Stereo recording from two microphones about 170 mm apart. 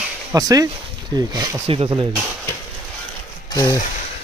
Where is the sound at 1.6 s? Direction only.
35° right (ahead or behind).